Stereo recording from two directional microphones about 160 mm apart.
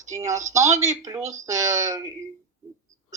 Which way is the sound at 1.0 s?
20° right (ahead or behind).